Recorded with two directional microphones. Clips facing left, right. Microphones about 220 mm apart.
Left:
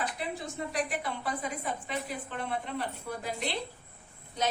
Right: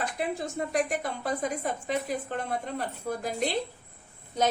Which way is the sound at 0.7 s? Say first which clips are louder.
Right 4 dB; 45° right (ahead or behind).